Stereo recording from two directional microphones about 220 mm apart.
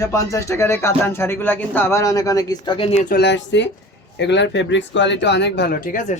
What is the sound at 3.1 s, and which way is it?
Speech, 50° left (ahead or behind).